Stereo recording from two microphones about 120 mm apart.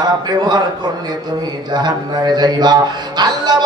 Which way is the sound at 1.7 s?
35° right (ahead or behind).